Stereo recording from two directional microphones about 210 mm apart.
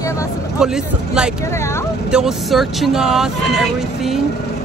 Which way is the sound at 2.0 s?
5° right (ahead or behind).